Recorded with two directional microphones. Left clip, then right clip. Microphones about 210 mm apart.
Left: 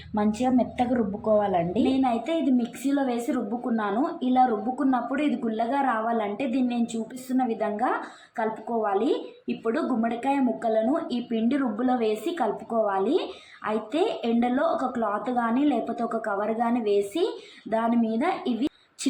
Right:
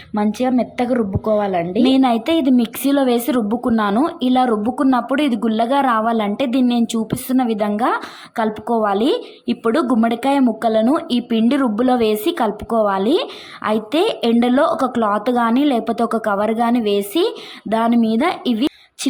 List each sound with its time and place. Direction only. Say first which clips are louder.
0.1 s a woman's voice: right 6 dB; 25° right (ahead or behind)
1.8 s a woman's voice: right 9 dB; 45° right (ahead or behind)